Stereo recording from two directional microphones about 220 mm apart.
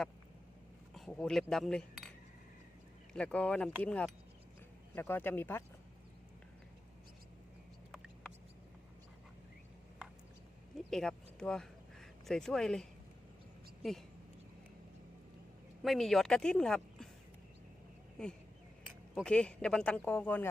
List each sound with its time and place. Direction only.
0.9 s speech: centre (ahead or behind)
10.8 s a sound: centre (ahead or behind)
15.8 s speech: centre (ahead or behind)
18.2 s speech: 5° left (ahead or behind)